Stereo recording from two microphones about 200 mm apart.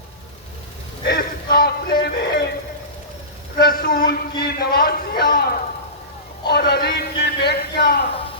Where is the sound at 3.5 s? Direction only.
50° left (ahead or behind).